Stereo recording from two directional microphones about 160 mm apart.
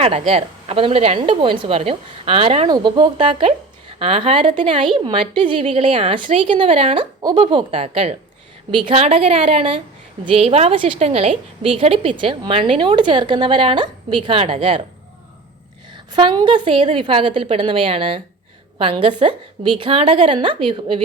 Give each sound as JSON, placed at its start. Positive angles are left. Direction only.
{"t": 0.0, "sound": "a woman's voice", "side_deg": -40}
{"t": 2.6, "sound": "a woman's voice", "side_deg": -30}
{"t": 16.1, "sound": "a woman's voice", "side_deg": -30}